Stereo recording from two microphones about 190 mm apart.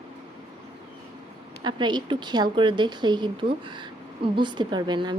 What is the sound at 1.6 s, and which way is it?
A woman's voice, 25° right (ahead or behind).